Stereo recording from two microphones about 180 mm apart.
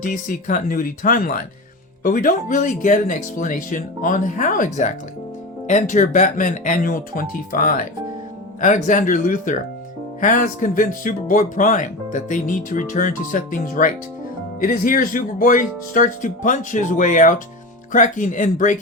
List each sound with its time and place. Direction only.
0.0 s speech: 45° left (ahead or behind)